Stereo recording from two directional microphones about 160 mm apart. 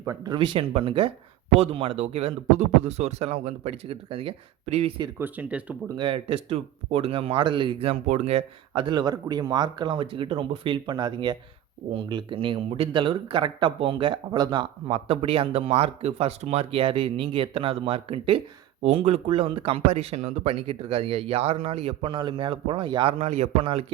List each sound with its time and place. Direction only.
0.0 s speech: 25° right (ahead or behind)
5.2 s speech: 10° right (ahead or behind)
6.0 s speech: 35° right (ahead or behind)